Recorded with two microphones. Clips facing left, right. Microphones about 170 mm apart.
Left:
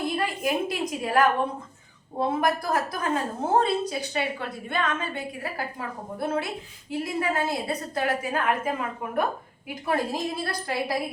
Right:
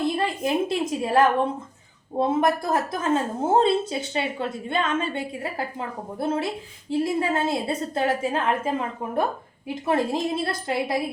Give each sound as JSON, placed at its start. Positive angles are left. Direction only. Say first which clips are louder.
{"t": 0.2, "sound": "a woman's voice", "louder": "right 3 dB", "side_deg": -25}